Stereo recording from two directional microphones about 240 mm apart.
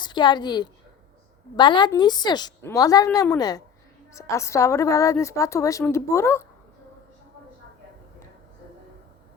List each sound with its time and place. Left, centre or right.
0.0 s a woman's voice: centre